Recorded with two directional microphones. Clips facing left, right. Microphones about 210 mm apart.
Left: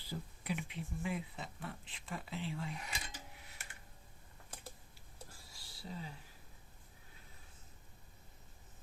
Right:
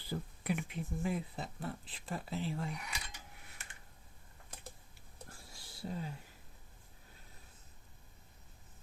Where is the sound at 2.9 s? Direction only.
30° left (ahead or behind).